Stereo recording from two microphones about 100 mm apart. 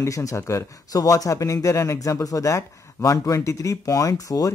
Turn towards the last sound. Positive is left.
turn(degrees=35)  # may be behind; listen again after turning